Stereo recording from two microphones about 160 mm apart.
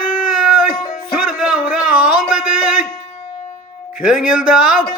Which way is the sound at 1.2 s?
5° right (ahead or behind).